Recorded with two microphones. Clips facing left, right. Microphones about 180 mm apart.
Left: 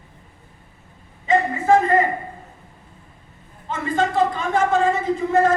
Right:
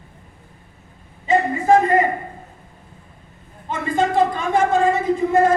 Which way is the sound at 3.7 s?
10° right (ahead or behind).